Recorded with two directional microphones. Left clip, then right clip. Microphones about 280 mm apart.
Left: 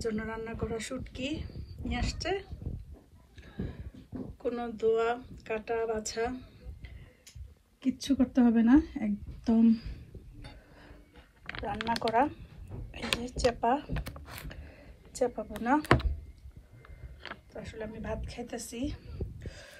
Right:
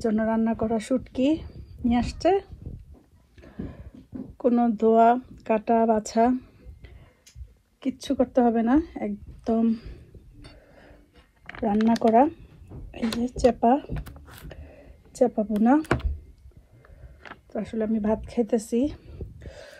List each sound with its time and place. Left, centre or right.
0.0 s speech: centre
3.3 s a sound: centre
4.4 s speech: centre
12.2 s speech: right
15.2 s speech: right
17.5 s speech: centre
19.4 s gasp: centre